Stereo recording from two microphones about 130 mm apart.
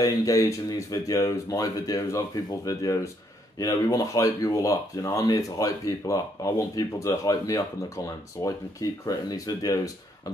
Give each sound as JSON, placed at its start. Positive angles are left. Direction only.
{"t": 0.0, "sound": "speech", "side_deg": 30}
{"t": 9.0, "sound": "speech", "side_deg": 30}